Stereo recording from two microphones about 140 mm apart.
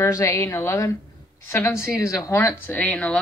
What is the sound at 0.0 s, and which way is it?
A woman's voice, 20° left (ahead or behind).